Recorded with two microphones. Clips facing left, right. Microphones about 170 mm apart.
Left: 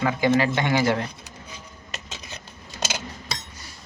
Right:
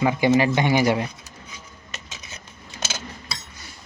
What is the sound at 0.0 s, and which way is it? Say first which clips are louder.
Speech: right 2 dB; 20° right (ahead or behind).